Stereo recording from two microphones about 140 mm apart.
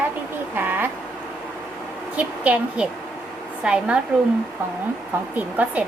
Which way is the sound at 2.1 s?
10° right (ahead or behind).